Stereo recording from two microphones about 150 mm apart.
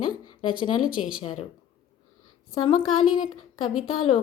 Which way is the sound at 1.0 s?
45° left (ahead or behind).